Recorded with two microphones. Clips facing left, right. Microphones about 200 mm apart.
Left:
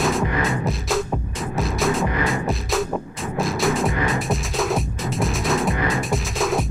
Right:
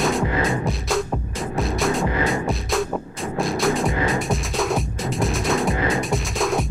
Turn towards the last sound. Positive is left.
turn(degrees=0)  # may be behind; listen again after turning